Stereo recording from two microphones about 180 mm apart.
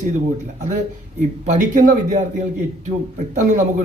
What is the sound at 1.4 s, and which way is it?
Speech, 45° right (ahead or behind).